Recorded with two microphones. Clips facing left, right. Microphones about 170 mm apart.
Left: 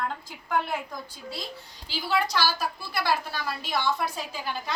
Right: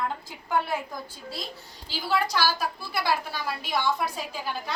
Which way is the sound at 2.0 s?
10° right (ahead or behind).